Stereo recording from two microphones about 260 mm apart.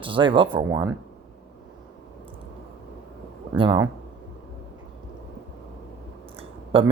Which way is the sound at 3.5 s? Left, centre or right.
Centre.